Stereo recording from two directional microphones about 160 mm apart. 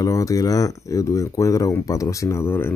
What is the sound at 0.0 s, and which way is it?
Speech, 20° left (ahead or behind).